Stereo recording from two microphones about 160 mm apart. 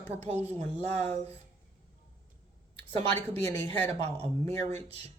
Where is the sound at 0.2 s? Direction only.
40° right (ahead or behind).